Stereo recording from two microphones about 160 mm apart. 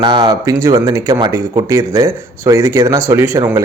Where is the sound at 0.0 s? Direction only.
30° right (ahead or behind).